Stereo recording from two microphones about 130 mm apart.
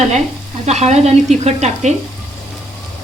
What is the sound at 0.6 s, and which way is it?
Speech, 55° right (ahead or behind).